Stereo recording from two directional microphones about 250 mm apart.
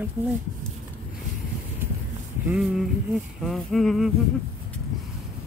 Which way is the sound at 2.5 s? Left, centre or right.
Centre.